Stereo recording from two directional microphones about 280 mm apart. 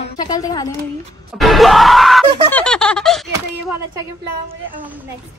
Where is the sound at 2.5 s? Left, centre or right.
Centre.